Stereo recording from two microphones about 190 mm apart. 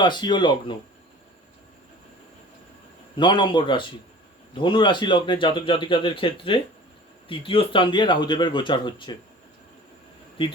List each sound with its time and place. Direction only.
0.0 s speech: 25° left (ahead or behind)
3.2 s speech: 25° left (ahead or behind)